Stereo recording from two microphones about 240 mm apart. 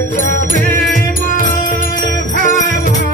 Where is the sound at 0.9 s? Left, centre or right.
Left.